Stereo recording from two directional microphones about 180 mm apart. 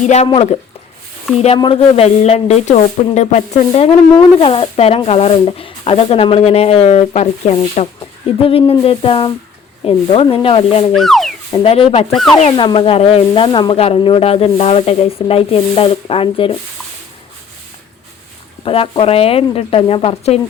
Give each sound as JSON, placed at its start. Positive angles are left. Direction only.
{"t": 0.0, "sound": "speech", "side_deg": 40}
{"t": 3.7, "sound": "speech", "side_deg": 30}
{"t": 10.9, "sound": "speech", "side_deg": 0}
{"t": 11.5, "sound": "speech", "side_deg": 30}
{"t": 12.1, "sound": "speech", "side_deg": 0}
{"t": 12.4, "sound": "speech", "side_deg": 30}
{"t": 18.6, "sound": "speech", "side_deg": 30}